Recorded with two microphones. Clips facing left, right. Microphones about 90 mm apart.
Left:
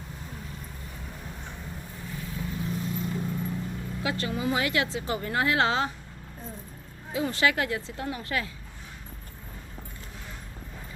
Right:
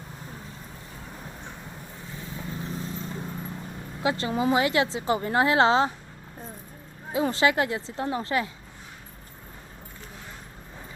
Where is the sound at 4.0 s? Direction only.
25° right (ahead or behind).